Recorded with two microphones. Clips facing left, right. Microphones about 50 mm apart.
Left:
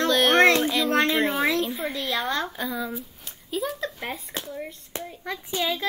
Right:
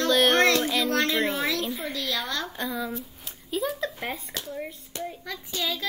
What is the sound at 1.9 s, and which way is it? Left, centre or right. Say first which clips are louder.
Speech: left 3 dB; centre.